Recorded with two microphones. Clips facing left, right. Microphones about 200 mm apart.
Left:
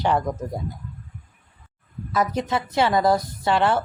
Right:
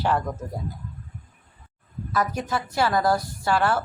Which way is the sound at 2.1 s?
20° left (ahead or behind).